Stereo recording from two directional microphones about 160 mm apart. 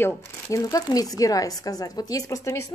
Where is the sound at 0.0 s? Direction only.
15° left (ahead or behind).